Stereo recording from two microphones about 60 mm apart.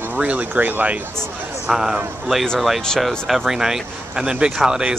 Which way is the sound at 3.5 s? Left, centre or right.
Centre.